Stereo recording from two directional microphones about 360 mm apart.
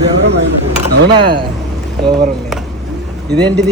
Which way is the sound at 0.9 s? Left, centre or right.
Right.